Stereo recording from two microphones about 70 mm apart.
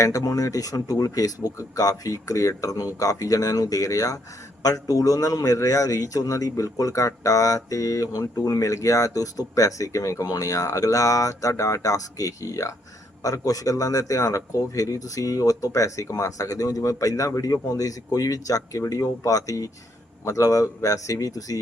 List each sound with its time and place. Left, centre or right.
0.0 s a man's voice: left